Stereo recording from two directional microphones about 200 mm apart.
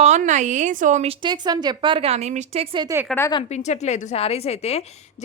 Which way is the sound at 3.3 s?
30° left (ahead or behind).